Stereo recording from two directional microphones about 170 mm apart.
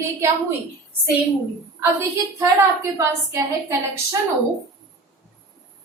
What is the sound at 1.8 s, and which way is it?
A woman's voice, 15° right (ahead or behind).